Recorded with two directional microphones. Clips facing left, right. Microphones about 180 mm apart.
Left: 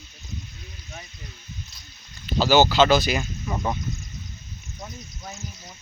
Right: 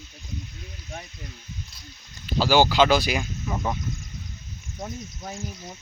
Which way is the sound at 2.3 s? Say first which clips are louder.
Left 1 dB; 10° right (ahead or behind).